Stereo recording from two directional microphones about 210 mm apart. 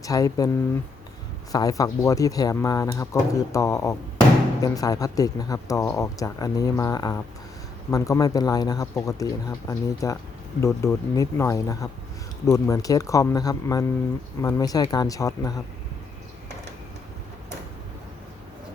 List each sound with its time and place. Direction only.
0.0 s speech: 15° left (ahead or behind)
1.5 s speech: 15° left (ahead or behind)